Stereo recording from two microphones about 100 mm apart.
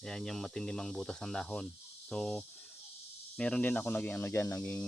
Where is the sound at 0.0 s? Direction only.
5° left (ahead or behind).